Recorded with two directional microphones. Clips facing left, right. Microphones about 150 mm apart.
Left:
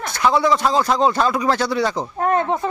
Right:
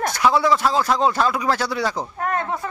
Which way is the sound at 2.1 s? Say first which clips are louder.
Left 5 dB; 25° left (ahead or behind).